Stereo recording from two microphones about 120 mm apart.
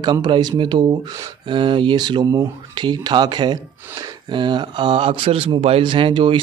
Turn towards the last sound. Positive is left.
turn(degrees=-45)  # may be behind; listen again after turning